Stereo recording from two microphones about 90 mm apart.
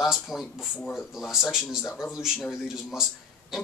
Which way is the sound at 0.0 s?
Centre (ahead or behind).